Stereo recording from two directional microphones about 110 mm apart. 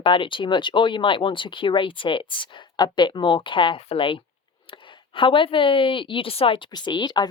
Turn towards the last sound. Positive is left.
turn(degrees=40)  # may be behind; listen again after turning